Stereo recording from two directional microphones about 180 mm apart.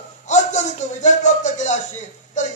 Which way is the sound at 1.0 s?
40° left (ahead or behind).